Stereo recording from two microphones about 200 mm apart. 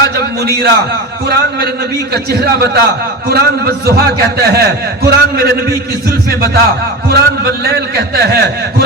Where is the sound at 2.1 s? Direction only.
50° right (ahead or behind).